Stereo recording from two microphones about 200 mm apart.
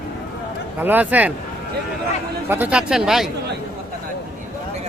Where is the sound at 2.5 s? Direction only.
10° right (ahead or behind).